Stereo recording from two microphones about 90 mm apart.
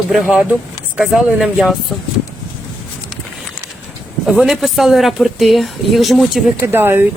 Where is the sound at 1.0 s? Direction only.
5° right (ahead or behind).